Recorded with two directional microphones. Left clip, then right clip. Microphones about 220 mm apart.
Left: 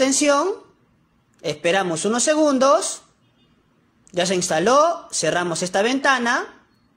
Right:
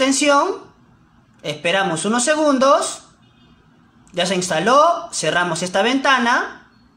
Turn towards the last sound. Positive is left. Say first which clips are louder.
# right 3 dB
turn(degrees=30)  # may be behind; listen again after turning